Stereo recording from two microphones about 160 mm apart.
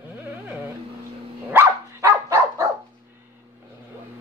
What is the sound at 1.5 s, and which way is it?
Dog, 15° right (ahead or behind).